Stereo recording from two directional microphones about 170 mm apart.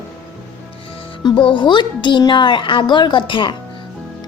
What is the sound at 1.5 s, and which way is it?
A woman's voice, 25° left (ahead or behind).